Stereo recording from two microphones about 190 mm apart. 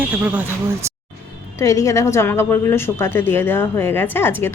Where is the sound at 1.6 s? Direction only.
15° left (ahead or behind).